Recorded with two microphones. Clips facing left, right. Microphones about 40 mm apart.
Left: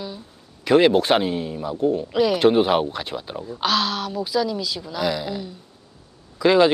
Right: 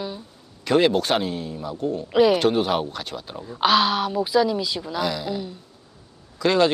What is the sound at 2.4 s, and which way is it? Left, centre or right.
Speech, centre.